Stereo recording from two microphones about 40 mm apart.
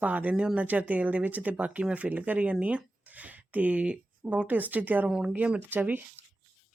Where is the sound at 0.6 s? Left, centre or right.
Right.